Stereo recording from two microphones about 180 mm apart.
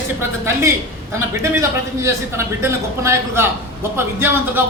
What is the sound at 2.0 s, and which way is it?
A man's voice, 15° right (ahead or behind).